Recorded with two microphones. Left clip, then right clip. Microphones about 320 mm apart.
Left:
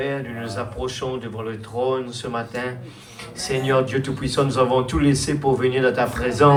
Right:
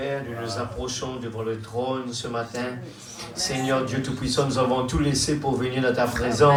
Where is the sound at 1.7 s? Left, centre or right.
Left.